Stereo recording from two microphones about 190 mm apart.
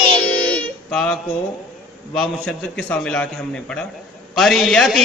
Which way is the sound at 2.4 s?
5° left (ahead or behind).